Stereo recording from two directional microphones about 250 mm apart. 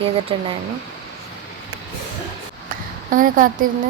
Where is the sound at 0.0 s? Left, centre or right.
Right.